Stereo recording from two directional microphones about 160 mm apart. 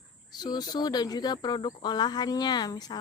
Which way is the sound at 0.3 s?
25° left (ahead or behind).